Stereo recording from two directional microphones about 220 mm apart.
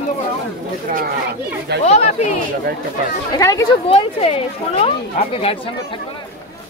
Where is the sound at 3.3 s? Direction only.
15° left (ahead or behind).